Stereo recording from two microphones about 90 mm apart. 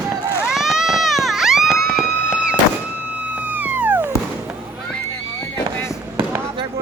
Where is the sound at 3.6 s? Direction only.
20° right (ahead or behind).